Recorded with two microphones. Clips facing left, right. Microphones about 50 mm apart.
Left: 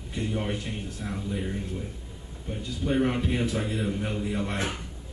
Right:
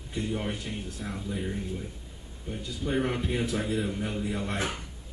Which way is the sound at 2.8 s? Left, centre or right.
Centre.